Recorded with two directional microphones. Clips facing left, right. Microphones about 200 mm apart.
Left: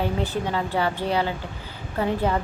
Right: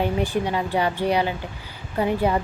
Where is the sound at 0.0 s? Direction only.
15° right (ahead or behind).